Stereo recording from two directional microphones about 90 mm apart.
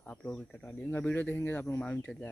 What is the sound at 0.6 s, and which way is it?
Speech, 20° left (ahead or behind).